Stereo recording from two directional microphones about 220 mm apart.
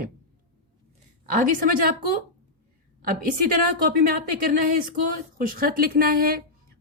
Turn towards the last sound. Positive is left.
turn(degrees=-45)  # may be behind; listen again after turning